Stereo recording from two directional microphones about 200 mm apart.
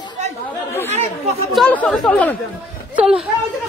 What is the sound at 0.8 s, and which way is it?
Speech, 35° right (ahead or behind).